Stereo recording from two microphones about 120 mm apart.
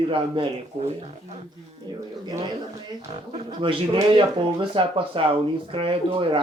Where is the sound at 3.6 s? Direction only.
45° right (ahead or behind).